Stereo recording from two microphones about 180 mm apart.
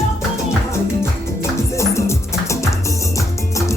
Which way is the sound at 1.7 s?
15° left (ahead or behind).